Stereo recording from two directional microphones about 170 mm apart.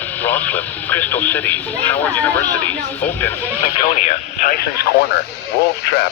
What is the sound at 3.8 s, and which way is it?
Speech, 45° left (ahead or behind).